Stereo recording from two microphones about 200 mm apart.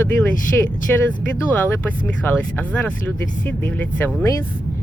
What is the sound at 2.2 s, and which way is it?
Speech, 5° left (ahead or behind).